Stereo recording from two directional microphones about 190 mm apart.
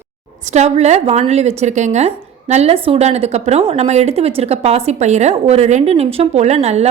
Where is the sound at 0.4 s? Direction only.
35° right (ahead or behind).